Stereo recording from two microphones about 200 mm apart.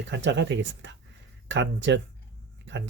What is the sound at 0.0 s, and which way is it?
Speech, 65° right (ahead or behind).